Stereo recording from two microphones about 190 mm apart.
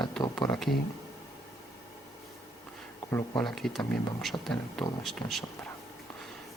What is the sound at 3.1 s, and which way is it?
Speech, 10° left (ahead or behind).